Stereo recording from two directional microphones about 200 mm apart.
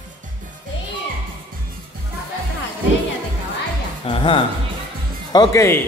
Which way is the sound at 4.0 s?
25° left (ahead or behind).